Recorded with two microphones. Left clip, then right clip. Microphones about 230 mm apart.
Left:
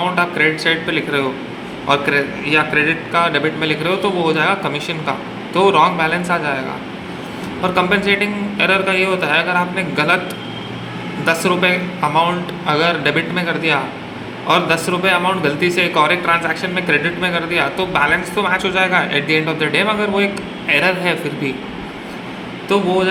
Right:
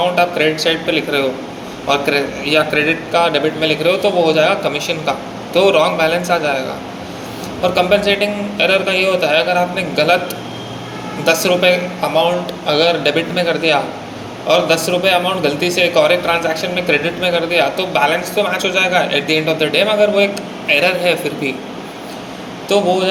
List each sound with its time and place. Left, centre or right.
0.2 s a man's voice: centre
7.6 s a man's voice: left
11.3 s a man's voice: left